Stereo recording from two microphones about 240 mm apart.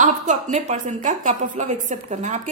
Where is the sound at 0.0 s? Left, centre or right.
Right.